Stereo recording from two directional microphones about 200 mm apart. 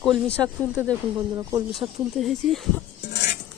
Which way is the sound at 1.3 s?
15° right (ahead or behind).